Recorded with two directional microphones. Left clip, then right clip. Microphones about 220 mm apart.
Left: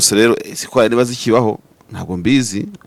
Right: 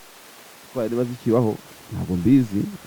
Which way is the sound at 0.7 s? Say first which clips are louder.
Left 12 dB; 15° left (ahead or behind).